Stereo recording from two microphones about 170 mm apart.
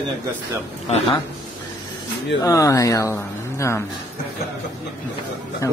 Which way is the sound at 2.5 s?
20° left (ahead or behind).